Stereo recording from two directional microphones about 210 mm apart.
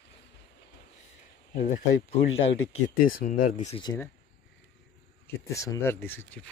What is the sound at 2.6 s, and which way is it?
Speech, 80° left.